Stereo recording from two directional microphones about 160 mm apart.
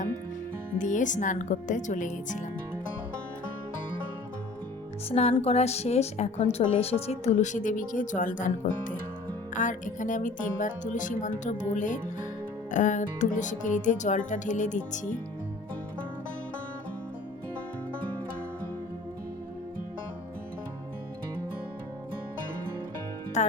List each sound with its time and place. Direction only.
0.8 s a woman's voice: 50° left (ahead or behind)
5.0 s a woman's voice: 40° left (ahead or behind)
23.4 s music: 45° left (ahead or behind)